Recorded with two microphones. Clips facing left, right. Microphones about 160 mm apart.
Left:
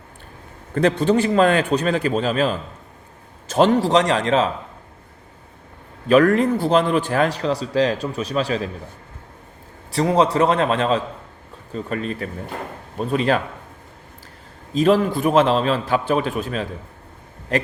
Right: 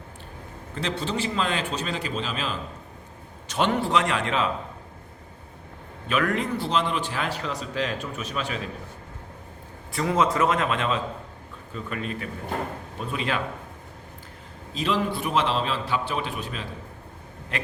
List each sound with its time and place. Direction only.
0.7 s a man's voice: 55° left (ahead or behind); by 4.4 s 40° left (ahead or behind)
6.1 s a man's voice: 40° left (ahead or behind)
9.9 s a man's voice: 35° left (ahead or behind)
14.7 s a man's voice: 45° left (ahead or behind)